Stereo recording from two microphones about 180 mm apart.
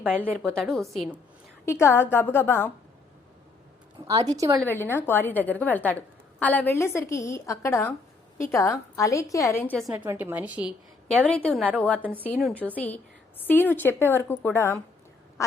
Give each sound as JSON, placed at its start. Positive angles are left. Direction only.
{"t": 0.0, "sound": "a woman's voice", "side_deg": -10}
{"t": 0.4, "sound": "a woman's voice", "side_deg": 5}
{"t": 1.6, "sound": "a woman's voice", "side_deg": 15}
{"t": 4.3, "sound": "a woman's voice", "side_deg": -20}
{"t": 4.6, "sound": "a woman's voice", "side_deg": 10}
{"t": 10.1, "sound": "a woman's voice", "side_deg": -10}
{"t": 11.3, "sound": "a woman's voice", "side_deg": 5}